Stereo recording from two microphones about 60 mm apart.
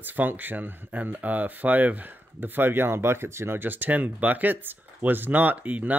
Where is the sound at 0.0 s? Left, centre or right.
Right.